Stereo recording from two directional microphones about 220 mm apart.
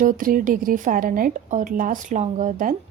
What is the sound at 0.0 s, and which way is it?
A woman's voice, 40° right (ahead or behind).